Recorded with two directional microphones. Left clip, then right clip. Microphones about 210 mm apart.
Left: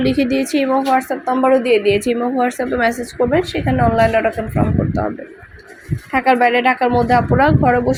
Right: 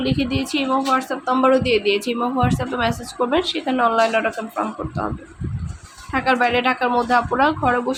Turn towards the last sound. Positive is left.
turn(degrees=10)  # may be behind; listen again after turning